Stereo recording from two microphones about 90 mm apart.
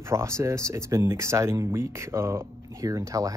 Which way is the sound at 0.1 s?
35° right (ahead or behind).